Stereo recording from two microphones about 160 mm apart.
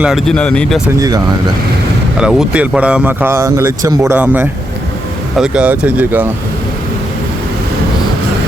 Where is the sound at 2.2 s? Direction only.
5° right (ahead or behind).